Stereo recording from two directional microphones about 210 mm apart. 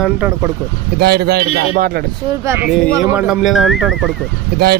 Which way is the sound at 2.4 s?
10° right (ahead or behind).